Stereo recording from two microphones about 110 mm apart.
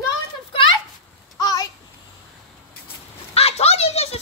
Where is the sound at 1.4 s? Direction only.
35° left (ahead or behind).